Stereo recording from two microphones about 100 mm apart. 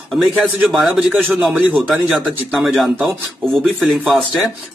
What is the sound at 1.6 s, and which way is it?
Speech, 15° right (ahead or behind).